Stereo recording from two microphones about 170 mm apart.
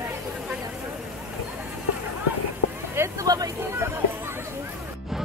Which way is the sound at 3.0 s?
20° right (ahead or behind).